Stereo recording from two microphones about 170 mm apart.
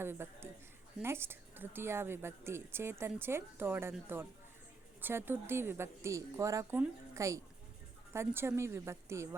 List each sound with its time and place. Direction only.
0.0 s a woman's voice: 15° right (ahead or behind)